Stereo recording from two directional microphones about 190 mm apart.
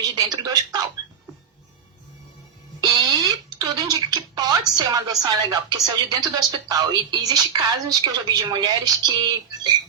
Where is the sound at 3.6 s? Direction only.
20° right (ahead or behind).